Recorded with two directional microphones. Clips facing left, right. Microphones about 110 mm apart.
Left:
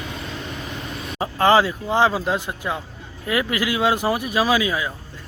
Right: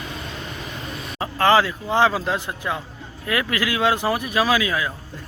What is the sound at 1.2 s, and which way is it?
Speech, 20° left (ahead or behind).